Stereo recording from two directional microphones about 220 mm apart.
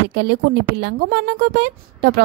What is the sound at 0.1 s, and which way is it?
A woman's voice, 50° right (ahead or behind).